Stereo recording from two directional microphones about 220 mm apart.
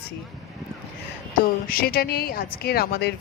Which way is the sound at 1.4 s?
40° left (ahead or behind).